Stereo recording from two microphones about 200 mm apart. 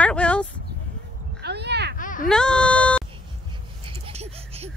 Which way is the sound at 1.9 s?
40° left (ahead or behind).